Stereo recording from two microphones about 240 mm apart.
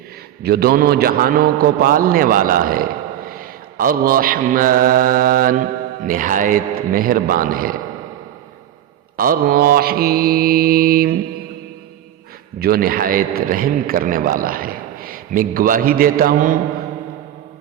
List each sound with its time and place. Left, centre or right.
0.4 s mantra: right
9.1 s mantra: right
12.5 s mantra: right